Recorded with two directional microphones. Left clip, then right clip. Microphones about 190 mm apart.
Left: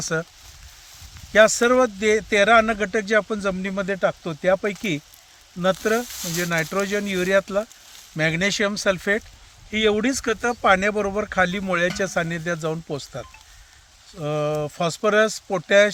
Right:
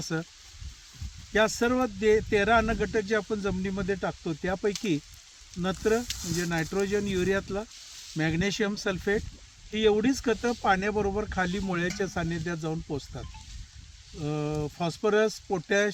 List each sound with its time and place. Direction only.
0.0 s speech: 40° left (ahead or behind)
1.3 s speech: 40° left (ahead or behind)